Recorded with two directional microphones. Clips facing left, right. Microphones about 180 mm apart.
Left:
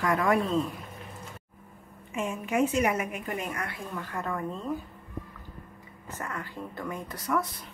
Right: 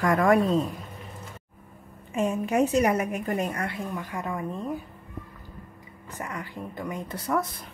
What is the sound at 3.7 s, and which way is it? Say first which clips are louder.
Speech: right 3 dB; 15° right (ahead or behind).